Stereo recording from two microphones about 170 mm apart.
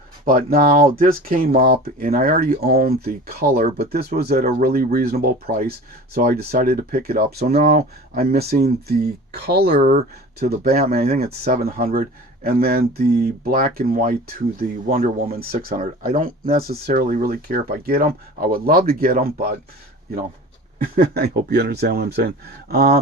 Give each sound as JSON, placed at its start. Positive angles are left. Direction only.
{"t": 0.3, "sound": "speech", "side_deg": -55}
{"t": 7.5, "sound": "speech", "side_deg": -40}
{"t": 8.1, "sound": "speech", "side_deg": -65}
{"t": 14.8, "sound": "speech", "side_deg": -40}
{"t": 15.3, "sound": "speech", "side_deg": -60}
{"t": 20.8, "sound": "speech", "side_deg": -60}